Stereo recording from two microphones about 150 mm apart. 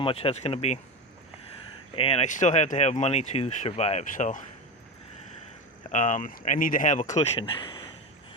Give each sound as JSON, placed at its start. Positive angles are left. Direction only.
{"t": 0.0, "sound": "speech", "side_deg": 40}
{"t": 2.0, "sound": "speech", "side_deg": 40}
{"t": 5.9, "sound": "speech", "side_deg": 55}
{"t": 7.3, "sound": "speech", "side_deg": 30}